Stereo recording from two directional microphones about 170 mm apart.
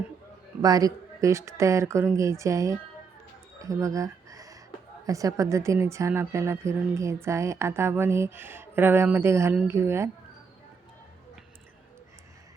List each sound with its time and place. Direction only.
0.6 s speech: 20° right (ahead or behind)
3.6 s a sound: 20° right (ahead or behind)
5.0 s speech: 20° right (ahead or behind)